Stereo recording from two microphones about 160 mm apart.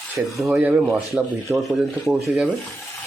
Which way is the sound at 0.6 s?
15° right (ahead or behind).